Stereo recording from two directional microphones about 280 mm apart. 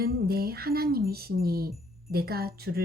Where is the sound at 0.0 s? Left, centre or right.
Right.